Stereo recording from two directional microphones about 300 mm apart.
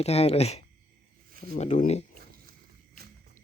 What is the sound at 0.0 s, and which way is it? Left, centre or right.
Speech, left.